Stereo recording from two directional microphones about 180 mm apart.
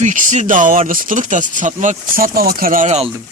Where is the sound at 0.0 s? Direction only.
45° right (ahead or behind).